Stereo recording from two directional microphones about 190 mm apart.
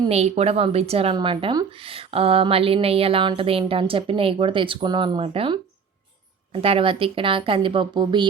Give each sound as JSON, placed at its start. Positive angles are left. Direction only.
{"t": 0.1, "sound": "speech", "side_deg": -35}